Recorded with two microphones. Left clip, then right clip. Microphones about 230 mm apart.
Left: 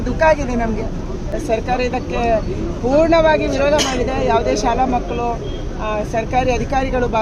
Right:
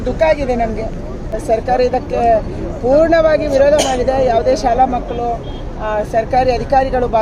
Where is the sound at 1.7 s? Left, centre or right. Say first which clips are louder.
Right 5 dB; centre.